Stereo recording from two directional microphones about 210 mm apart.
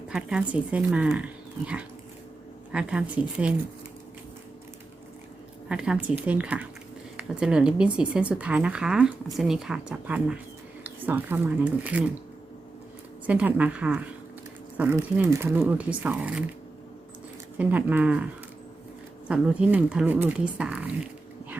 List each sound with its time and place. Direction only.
0.1 s a woman's voice: 5° right (ahead or behind)
5.6 s a woman's voice: 5° right (ahead or behind)
13.2 s speech: 5° right (ahead or behind)
17.6 s speech: 5° right (ahead or behind)
19.3 s speech: 5° right (ahead or behind)